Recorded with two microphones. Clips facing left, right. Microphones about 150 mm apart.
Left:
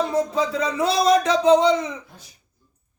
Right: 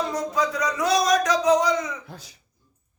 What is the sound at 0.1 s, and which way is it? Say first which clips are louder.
Music: left 3 dB; 25° left (ahead or behind).